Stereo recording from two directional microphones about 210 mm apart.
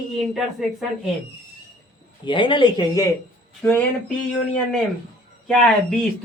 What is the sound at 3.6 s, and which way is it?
Speech, 5° left (ahead or behind).